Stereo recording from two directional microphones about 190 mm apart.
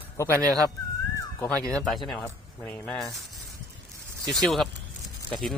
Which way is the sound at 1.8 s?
Centre (ahead or behind).